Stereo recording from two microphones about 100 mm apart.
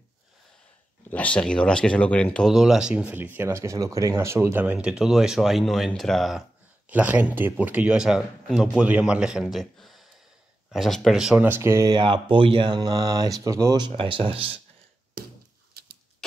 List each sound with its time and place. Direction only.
1.1 s speech: 10° left (ahead or behind)
2.5 s speech: 5° right (ahead or behind); by 4.7 s 20° right (ahead or behind)
4.7 s a man's voice: 5° right (ahead or behind)
6.9 s a man's voice: 15° right (ahead or behind)
11.4 s speech: 25° right (ahead or behind)
11.9 s speech: 55° right (ahead or behind); by 13.7 s 30° right (ahead or behind)
13.7 s speech: 55° right (ahead or behind); by 14.6 s 70° right (ahead or behind)